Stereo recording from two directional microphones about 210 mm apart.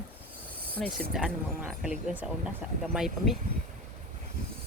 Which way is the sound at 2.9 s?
Centre (ahead or behind).